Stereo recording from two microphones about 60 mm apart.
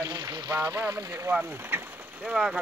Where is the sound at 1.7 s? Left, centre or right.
Right.